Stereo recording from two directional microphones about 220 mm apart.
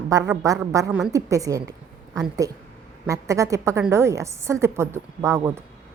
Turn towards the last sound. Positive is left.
turn(degrees=-15)  # may be behind; listen again after turning